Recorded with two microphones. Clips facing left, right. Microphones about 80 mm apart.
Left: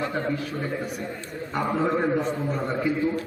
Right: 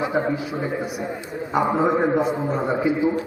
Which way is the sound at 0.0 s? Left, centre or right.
Centre.